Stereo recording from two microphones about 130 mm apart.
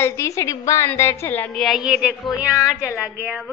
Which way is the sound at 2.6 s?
25° left (ahead or behind).